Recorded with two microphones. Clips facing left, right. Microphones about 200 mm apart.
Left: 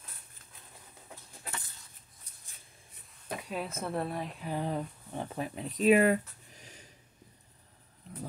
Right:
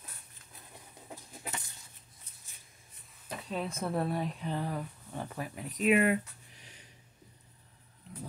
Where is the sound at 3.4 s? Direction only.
5° left (ahead or behind).